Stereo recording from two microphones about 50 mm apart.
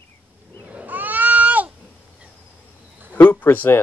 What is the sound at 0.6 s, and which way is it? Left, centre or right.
Goat, right.